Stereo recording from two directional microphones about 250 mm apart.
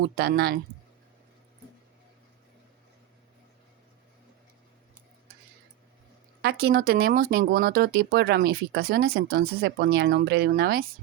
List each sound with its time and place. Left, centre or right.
0.2 s speech: right
6.4 s speech: right